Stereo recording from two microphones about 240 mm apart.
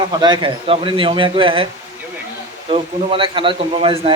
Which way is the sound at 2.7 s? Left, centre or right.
Right.